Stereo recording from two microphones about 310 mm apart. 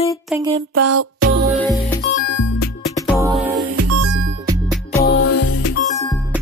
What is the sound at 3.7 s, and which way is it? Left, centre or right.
Music, right.